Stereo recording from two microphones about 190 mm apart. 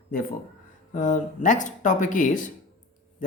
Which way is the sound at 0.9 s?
40° left (ahead or behind).